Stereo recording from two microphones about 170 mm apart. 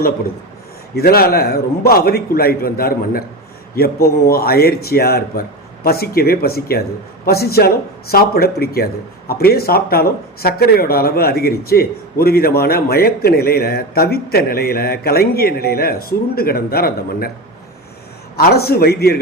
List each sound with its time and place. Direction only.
0.9 s speech: 65° left (ahead or behind)
18.3 s a man's voice: 65° left (ahead or behind)